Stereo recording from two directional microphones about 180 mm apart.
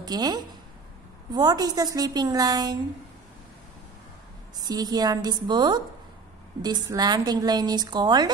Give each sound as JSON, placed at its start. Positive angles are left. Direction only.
{"t": 0.0, "sound": "a woman's voice", "side_deg": -20}
{"t": 4.6, "sound": "a woman's voice", "side_deg": -20}